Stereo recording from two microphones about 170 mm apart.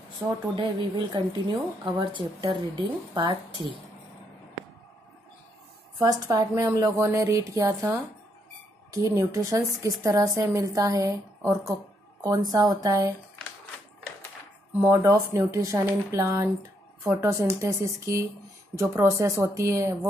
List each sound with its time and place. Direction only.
0.6 s speech: 25° right (ahead or behind)
5.9 s speech: 20° right (ahead or behind)
8.9 s speech: 20° right (ahead or behind)
14.7 s speech: 15° right (ahead or behind)